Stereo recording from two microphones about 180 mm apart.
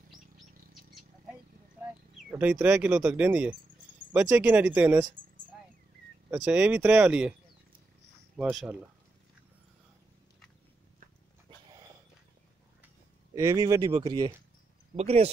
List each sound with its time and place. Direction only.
2.2 s speech: 10° right (ahead or behind)
6.3 s speech: 10° right (ahead or behind)
8.4 s speech: 5° right (ahead or behind)
13.3 s speech: 20° right (ahead or behind)
15.0 s speech: 35° right (ahead or behind)